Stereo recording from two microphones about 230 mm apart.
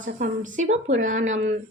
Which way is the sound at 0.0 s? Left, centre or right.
Right.